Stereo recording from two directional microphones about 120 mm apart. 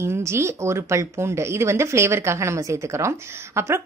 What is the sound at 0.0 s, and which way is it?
A woman's voice, 20° right (ahead or behind).